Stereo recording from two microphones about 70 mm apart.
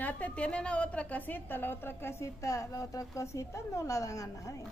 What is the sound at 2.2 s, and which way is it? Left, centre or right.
A woman's voice, left.